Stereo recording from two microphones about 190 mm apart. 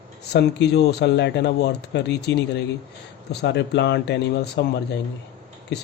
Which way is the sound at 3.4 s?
65° left (ahead or behind).